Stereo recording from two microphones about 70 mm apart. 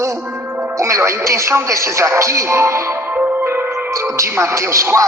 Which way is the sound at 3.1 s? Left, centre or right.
Right.